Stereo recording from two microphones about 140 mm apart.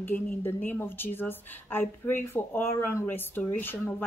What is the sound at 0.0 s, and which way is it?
A woman's voice, 15° left (ahead or behind).